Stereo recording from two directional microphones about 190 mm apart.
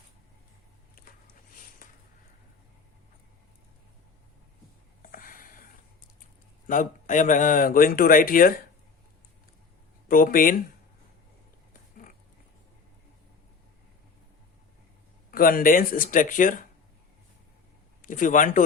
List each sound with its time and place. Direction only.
5.0 s a sound: 45° left (ahead or behind)
6.7 s speech: 45° left (ahead or behind)
10.1 s speech: 50° left (ahead or behind)
15.3 s speech: 50° left (ahead or behind)
18.0 s speech: 45° left (ahead or behind)